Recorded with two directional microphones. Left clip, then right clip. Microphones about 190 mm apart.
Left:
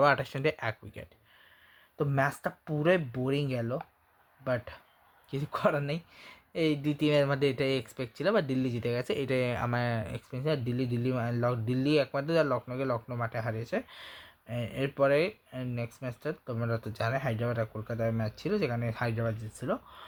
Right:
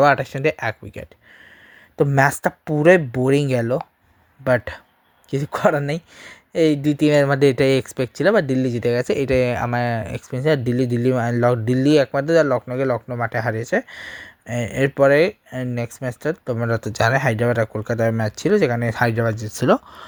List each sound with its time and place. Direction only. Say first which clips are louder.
0.0 s speech: right 10 dB; 25° right (ahead or behind)
2.0 s speech: right 13 dB; 40° right (ahead or behind)